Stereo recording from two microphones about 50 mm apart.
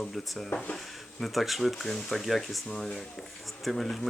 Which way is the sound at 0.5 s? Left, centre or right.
Left.